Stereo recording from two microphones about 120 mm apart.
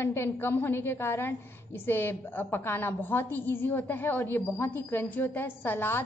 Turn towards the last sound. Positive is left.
turn(degrees=15)  # may be behind; listen again after turning